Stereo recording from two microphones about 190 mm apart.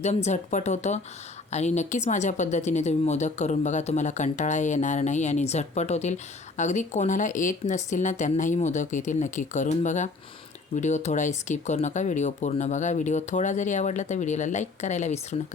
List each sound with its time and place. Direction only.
0.0 s a woman's voice: 35° left (ahead or behind)